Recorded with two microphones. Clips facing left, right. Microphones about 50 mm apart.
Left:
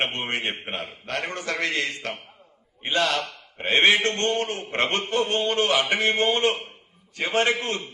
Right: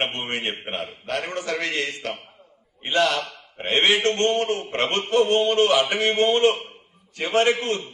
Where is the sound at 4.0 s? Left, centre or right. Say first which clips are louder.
Right 3 dB; right.